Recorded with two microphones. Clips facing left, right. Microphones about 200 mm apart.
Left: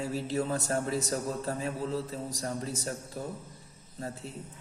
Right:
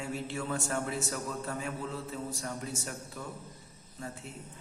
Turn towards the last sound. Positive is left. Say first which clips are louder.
# left 3 dB
turn(degrees=35)  # may be behind; listen again after turning